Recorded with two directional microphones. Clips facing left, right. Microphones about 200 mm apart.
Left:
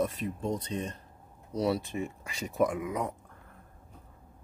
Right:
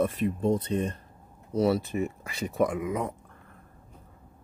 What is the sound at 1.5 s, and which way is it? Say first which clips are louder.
Speech: right 5 dB; centre (ahead or behind).